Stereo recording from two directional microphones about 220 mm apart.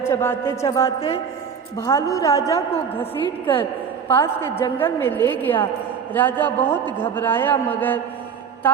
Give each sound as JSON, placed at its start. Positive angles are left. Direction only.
{"t": 0.0, "sound": "a man's voice", "side_deg": 10}
{"t": 0.8, "sound": "a woman's voice", "side_deg": 25}
{"t": 1.8, "sound": "a man's voice", "side_deg": 15}
{"t": 3.4, "sound": "a woman's voice", "side_deg": 25}
{"t": 4.1, "sound": "a man's voice", "side_deg": 10}